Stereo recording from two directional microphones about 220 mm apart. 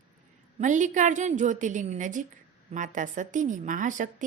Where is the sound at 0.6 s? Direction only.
35° right (ahead or behind).